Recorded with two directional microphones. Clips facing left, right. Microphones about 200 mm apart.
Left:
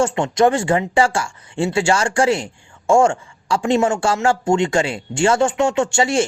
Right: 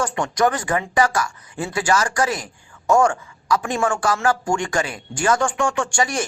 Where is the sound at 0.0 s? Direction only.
25° left (ahead or behind).